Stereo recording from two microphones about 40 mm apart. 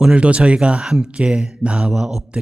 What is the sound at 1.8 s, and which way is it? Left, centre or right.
Mantra, centre.